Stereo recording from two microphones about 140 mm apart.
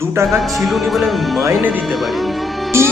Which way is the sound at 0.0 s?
20° right (ahead or behind).